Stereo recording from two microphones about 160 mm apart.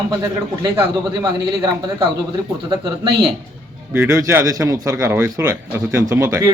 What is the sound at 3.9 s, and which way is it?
Speech, 15° right (ahead or behind).